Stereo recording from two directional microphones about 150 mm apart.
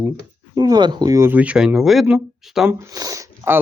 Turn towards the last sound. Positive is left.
turn(degrees=-20)  # may be behind; listen again after turning